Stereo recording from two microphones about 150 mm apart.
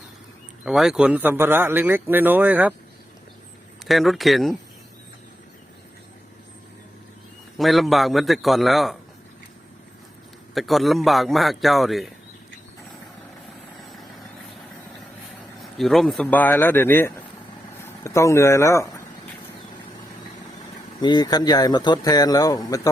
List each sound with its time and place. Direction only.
0.6 s speech: 5° right (ahead or behind)
3.8 s a man's voice: centre (ahead or behind)
7.6 s a man's voice: centre (ahead or behind)
10.5 s a man's voice: centre (ahead or behind)
15.8 s speech: centre (ahead or behind); by 19.0 s 20° left (ahead or behind)
21.0 s speech: 30° left (ahead or behind)